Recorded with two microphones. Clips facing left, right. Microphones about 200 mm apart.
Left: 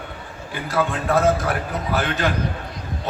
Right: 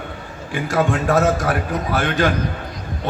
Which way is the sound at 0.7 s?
45° right (ahead or behind).